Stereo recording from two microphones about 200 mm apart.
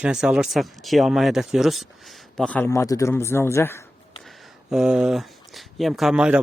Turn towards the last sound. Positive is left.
turn(degrees=-5)  # may be behind; listen again after turning